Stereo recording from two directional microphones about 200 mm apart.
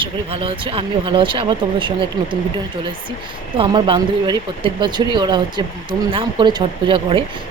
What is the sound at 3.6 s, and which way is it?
Speech, 25° right (ahead or behind).